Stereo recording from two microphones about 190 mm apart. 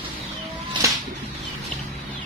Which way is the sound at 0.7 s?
25° right (ahead or behind).